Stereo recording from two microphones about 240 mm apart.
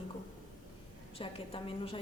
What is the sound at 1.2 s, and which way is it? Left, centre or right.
Speech, left.